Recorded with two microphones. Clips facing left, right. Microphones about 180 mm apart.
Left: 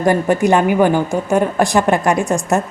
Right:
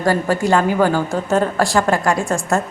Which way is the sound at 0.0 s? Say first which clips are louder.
Left 3 dB; 20° left (ahead or behind).